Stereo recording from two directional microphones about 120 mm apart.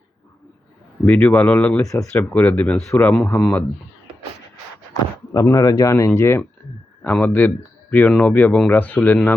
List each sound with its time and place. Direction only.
1.0 s a man's voice: 10° left (ahead or behind)
1.9 s speech: 25° left (ahead or behind)
2.3 s a man's voice: 15° left (ahead or behind)
5.3 s a man's voice: 30° left (ahead or behind); by 9.3 s 15° left (ahead or behind)